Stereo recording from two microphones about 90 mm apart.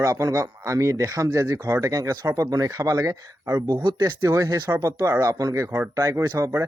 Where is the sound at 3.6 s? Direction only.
50° right (ahead or behind).